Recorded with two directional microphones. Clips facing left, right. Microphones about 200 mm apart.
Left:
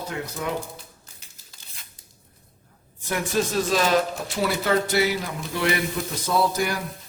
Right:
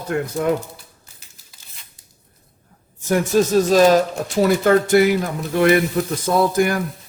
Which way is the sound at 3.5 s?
45° right (ahead or behind).